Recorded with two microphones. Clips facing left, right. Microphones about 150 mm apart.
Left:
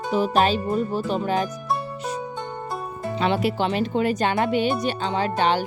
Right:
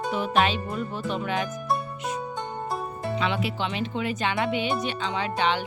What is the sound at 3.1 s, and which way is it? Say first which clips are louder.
Speech: left 6 dB; 40° left (ahead or behind).